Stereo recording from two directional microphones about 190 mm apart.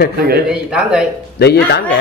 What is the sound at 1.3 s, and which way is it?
Speech, 60° left (ahead or behind).